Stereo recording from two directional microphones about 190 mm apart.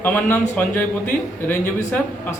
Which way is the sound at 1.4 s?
10° left (ahead or behind).